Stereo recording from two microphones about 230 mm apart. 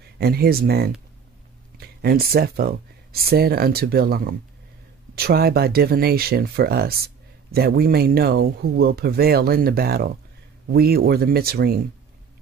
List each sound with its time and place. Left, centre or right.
0.2 s speech: right